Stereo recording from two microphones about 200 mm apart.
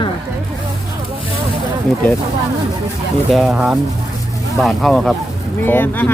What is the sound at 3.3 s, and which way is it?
Speech, centre (ahead or behind).